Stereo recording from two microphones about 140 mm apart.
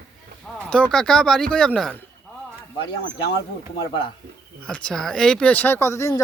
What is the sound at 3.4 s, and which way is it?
Speech, 35° left (ahead or behind).